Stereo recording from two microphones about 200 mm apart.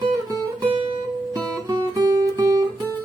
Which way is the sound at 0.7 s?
25° right (ahead or behind).